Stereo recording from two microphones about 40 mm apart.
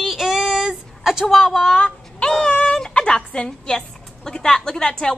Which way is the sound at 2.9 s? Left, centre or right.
Left.